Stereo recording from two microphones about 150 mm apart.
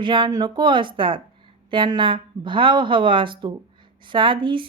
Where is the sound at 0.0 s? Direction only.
30° right (ahead or behind).